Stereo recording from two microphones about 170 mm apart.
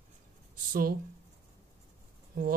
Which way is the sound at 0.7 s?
60° right (ahead or behind).